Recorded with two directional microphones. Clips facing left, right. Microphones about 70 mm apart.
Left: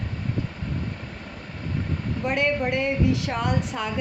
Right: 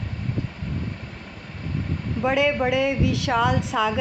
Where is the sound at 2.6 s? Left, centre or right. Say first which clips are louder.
Right 2 dB; right.